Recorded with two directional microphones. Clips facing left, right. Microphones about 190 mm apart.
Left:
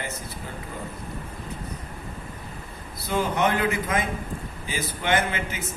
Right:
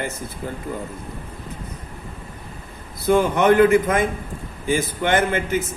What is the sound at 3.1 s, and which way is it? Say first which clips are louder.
A man's voice: right 8 dB; 55° right (ahead or behind).